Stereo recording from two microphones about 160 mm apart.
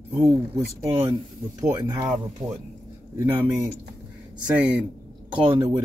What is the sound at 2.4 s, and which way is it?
Speech, centre (ahead or behind).